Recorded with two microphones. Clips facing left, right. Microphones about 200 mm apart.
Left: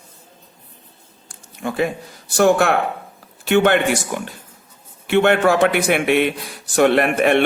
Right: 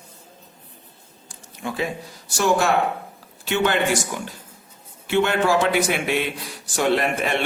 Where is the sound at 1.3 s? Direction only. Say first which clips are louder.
Left 4 dB; 55° left (ahead or behind).